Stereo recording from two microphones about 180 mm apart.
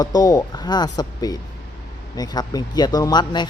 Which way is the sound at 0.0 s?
20° left (ahead or behind).